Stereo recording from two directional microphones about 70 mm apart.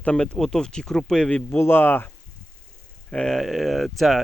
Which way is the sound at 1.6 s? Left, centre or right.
Left.